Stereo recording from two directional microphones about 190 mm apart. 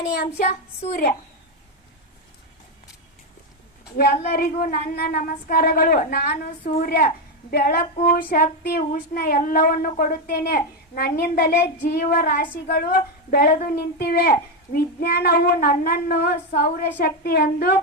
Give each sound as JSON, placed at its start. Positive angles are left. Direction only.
{"t": 0.2, "sound": "a woman's voice", "side_deg": 45}
{"t": 3.9, "sound": "a woman's voice", "side_deg": 50}